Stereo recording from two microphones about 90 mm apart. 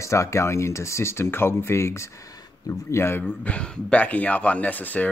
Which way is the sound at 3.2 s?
15° left (ahead or behind).